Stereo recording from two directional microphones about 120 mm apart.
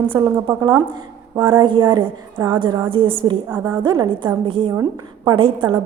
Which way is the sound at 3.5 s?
25° right (ahead or behind).